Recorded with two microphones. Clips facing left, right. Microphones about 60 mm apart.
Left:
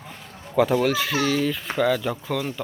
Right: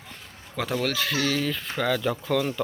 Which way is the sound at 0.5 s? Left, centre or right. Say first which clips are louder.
Left 7 dB; centre.